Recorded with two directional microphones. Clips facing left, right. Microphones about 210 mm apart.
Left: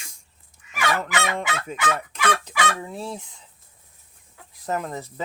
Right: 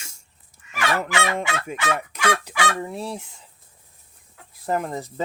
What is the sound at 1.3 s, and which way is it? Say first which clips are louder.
Fowl: right 2 dB; 15° right (ahead or behind).